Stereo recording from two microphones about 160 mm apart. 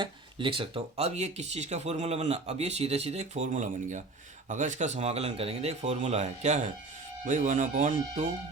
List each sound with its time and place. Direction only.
0.0 s speech: 30° right (ahead or behind); by 8.2 s 55° right (ahead or behind)